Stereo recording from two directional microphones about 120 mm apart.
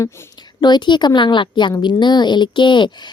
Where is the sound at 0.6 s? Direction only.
40° left (ahead or behind).